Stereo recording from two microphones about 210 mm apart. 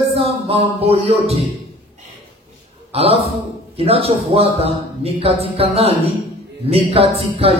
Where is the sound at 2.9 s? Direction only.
25° right (ahead or behind).